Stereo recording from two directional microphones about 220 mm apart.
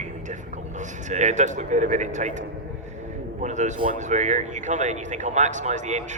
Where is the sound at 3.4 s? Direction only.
35° right (ahead or behind).